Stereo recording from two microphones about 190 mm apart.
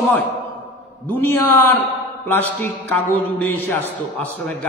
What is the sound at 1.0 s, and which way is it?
A man's voice, 10° left (ahead or behind).